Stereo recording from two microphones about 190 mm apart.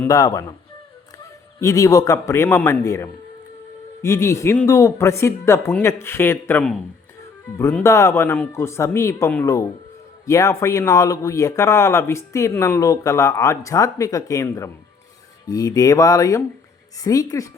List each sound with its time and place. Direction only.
0.0 s speech: 20° left (ahead or behind)
1.5 s speech: 15° left (ahead or behind)